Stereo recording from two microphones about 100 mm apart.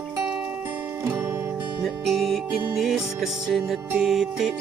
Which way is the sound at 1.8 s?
Centre (ahead or behind).